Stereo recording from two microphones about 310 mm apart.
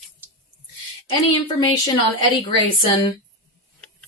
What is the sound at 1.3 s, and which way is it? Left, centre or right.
Speech, centre.